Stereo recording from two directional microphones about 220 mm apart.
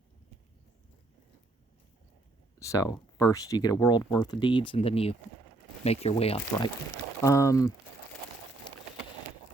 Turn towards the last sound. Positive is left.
turn(degrees=15)  # may be behind; listen again after turning